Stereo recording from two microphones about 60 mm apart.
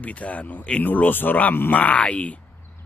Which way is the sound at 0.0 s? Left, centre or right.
Left.